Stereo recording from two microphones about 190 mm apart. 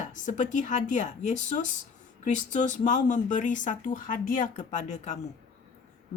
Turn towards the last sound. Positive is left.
turn(degrees=35)  # may be behind; listen again after turning